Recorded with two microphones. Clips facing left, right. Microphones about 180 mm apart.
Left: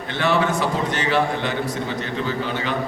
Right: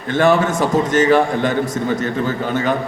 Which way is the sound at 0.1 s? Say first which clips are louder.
Right 6 dB; 45° right (ahead or behind).